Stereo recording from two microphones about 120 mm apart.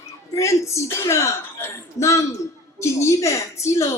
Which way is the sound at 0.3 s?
25° left (ahead or behind).